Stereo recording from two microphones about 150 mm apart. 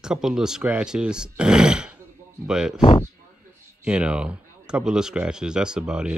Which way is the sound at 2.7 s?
30° left (ahead or behind).